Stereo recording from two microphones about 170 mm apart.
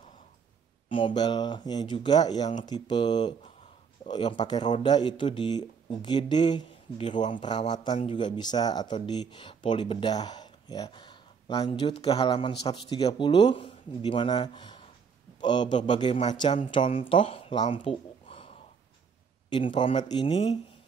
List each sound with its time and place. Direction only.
0.8 s speech: 30° left (ahead or behind)
12.1 s speech: 25° left (ahead or behind)
19.5 s speech: 30° left (ahead or behind)